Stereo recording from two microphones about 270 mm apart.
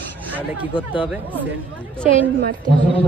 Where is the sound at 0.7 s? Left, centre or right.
Centre.